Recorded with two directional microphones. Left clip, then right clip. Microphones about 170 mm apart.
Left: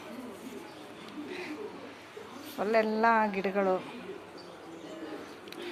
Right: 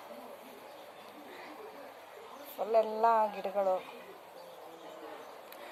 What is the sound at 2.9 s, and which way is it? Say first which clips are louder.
Speech: left 2 dB; 30° left (ahead or behind).